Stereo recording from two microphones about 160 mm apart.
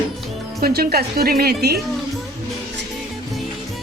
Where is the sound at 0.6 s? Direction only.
70° right (ahead or behind).